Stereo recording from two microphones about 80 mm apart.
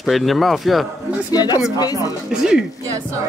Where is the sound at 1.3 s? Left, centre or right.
Left.